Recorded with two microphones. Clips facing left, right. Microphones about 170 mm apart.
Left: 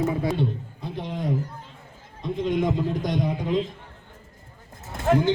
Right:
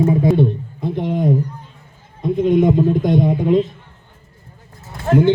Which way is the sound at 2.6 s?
55° right (ahead or behind).